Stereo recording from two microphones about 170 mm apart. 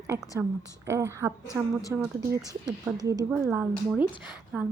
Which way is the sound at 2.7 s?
25° right (ahead or behind).